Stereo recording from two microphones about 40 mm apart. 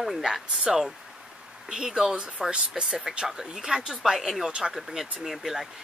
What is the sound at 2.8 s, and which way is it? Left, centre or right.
Speech, centre.